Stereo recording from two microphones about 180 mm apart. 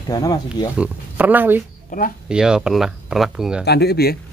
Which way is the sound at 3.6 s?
65° left (ahead or behind).